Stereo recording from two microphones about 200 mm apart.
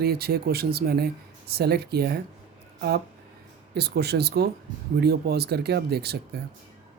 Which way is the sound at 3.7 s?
55° right (ahead or behind).